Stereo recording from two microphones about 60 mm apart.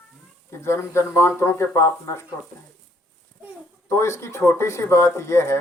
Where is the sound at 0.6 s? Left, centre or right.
Left.